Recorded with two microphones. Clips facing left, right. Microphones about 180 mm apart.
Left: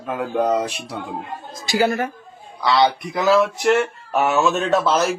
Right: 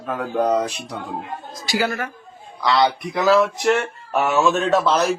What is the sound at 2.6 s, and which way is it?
A man's voice, centre (ahead or behind).